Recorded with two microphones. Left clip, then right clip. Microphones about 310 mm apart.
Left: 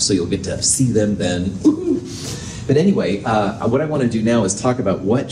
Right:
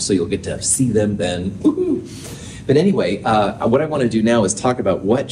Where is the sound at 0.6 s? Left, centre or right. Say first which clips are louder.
Left 1 dB; right.